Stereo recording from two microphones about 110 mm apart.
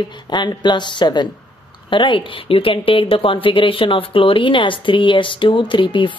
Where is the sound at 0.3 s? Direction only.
45° left (ahead or behind).